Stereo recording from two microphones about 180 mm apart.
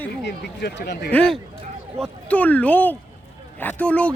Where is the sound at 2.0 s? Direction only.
10° left (ahead or behind).